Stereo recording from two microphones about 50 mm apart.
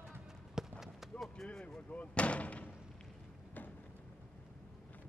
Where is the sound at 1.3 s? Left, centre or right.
Centre.